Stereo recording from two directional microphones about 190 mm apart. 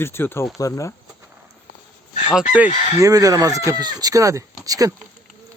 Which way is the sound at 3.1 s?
20° right (ahead or behind).